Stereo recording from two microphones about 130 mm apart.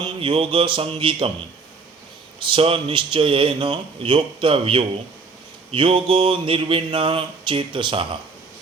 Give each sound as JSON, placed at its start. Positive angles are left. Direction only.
{"t": 0.2, "sound": "speech", "side_deg": -45}
{"t": 2.4, "sound": "speech", "side_deg": -45}